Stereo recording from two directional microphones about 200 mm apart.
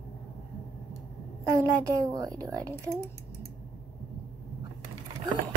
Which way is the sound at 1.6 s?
15° right (ahead or behind).